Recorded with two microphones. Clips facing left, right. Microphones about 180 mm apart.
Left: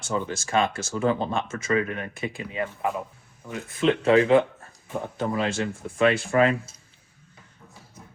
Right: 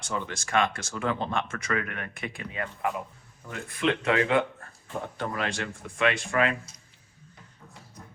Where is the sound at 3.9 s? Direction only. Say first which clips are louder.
Left 6 dB; 30° left (ahead or behind).